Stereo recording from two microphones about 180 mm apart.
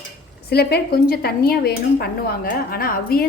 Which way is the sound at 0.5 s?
60° left (ahead or behind).